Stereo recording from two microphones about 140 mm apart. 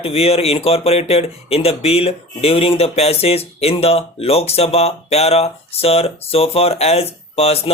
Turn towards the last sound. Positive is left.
turn(degrees=45)  # may be behind; listen again after turning